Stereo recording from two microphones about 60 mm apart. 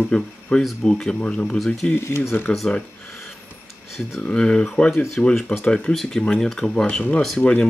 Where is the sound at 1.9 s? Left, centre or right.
Left.